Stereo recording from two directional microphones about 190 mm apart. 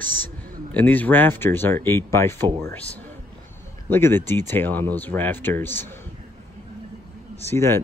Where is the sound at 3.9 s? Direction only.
10° left (ahead or behind).